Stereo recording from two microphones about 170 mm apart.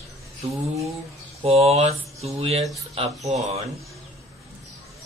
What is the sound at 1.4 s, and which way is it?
Speech, 35° right (ahead or behind).